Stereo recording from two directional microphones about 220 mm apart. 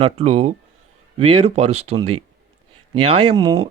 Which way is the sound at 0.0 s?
30° right (ahead or behind).